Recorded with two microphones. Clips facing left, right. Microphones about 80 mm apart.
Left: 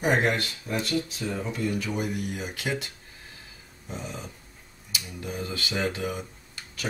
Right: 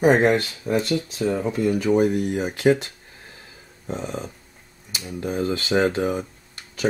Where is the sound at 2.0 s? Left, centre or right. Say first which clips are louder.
Right 11 dB; right.